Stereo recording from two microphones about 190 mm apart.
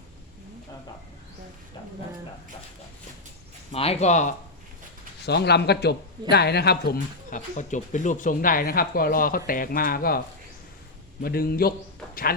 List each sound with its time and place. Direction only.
3.7 s speech: 35° left (ahead or behind)
5.2 s speech: 60° left (ahead or behind)
11.2 s speech: 55° left (ahead or behind)